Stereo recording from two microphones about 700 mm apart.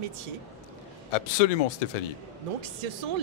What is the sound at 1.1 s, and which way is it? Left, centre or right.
Speech, left.